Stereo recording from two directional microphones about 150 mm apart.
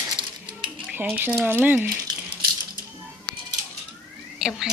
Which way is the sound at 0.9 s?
10° right (ahead or behind).